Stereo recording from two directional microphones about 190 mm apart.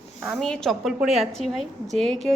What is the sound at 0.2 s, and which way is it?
A woman's voice, centre (ahead or behind).